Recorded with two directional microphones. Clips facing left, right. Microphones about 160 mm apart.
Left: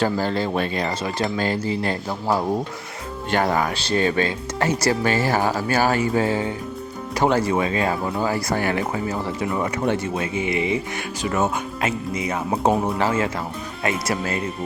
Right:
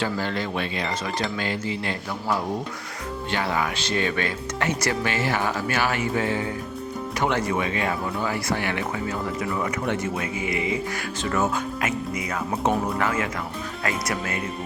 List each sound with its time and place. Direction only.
0.0 s speech: 35° left (ahead or behind)